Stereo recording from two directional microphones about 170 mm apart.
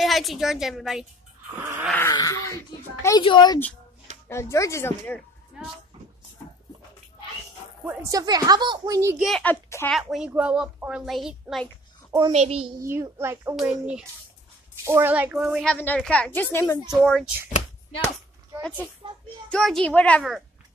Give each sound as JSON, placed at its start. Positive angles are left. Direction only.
{"t": 0.0, "sound": "a child's voice", "side_deg": 0}
{"t": 1.6, "sound": "a child's voice", "side_deg": -10}
{"t": 2.0, "sound": "a child's voice", "side_deg": 20}
{"t": 4.3, "sound": "speech", "side_deg": 15}
{"t": 8.1, "sound": "a woman's voice", "side_deg": -20}
{"t": 9.2, "sound": "speech", "side_deg": 5}
{"t": 9.8, "sound": "a child's voice", "side_deg": 0}
{"t": 12.3, "sound": "a child's voice", "side_deg": -40}
{"t": 12.8, "sound": "a child's voice", "side_deg": -15}
{"t": 13.6, "sound": "a child's voice", "side_deg": -5}
{"t": 16.9, "sound": "a child's voice", "side_deg": 5}
{"t": 18.6, "sound": "speech", "side_deg": 10}